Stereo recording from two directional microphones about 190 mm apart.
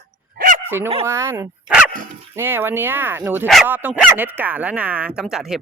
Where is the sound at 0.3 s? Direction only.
45° right (ahead or behind).